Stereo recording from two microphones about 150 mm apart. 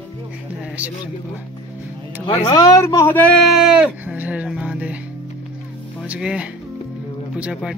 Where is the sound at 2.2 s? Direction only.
30° left (ahead or behind).